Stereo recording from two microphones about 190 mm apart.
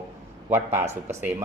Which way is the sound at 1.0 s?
10° right (ahead or behind).